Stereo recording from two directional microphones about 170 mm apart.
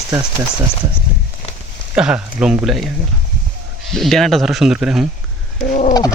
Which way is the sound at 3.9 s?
Centre (ahead or behind).